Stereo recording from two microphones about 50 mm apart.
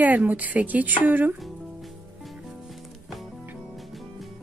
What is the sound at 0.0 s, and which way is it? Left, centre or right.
Speech, right.